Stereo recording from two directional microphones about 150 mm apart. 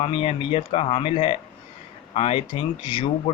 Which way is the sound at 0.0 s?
35° left (ahead or behind).